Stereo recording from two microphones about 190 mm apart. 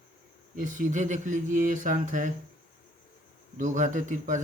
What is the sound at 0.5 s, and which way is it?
Speech, 45° right (ahead or behind).